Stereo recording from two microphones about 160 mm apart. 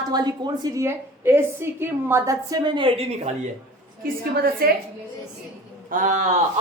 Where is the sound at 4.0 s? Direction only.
70° right (ahead or behind).